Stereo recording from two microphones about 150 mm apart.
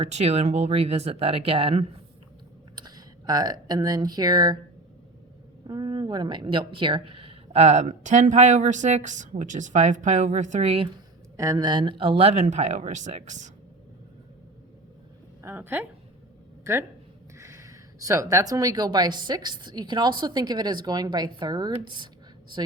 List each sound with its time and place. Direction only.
0.0 s a woman's voice: 45° right (ahead or behind)
2.7 s speech: 25° right (ahead or behind)
5.6 s a woman's voice: 30° right (ahead or behind)
11.3 s a woman's voice: 25° right (ahead or behind); by 13.5 s 55° right (ahead or behind)
15.4 s a woman's voice: 15° right (ahead or behind); by 22.1 s 30° right (ahead or behind)